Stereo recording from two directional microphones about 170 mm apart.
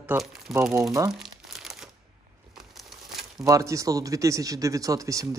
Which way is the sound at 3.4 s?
20° right (ahead or behind).